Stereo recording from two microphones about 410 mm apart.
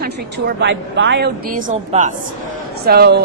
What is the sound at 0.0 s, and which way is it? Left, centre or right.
A woman's voice, right.